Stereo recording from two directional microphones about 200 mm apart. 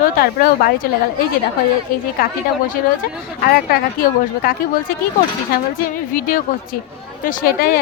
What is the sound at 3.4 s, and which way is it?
Speech, 50° left (ahead or behind).